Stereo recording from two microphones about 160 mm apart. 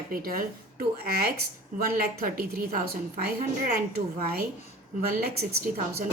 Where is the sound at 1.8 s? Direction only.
70° right (ahead or behind).